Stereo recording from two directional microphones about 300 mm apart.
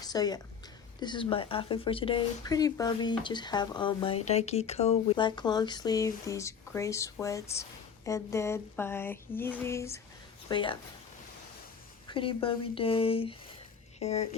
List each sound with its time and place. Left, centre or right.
0.0 s a woman's voice: centre
12.0 s speech: centre